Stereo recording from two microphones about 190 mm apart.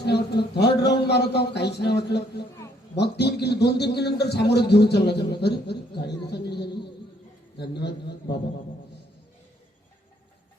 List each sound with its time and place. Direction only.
0.0 s a man's voice: 60° left (ahead or behind)